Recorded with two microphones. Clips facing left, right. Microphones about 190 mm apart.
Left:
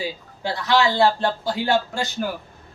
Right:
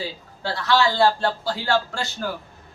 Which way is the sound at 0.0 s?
15° left (ahead or behind).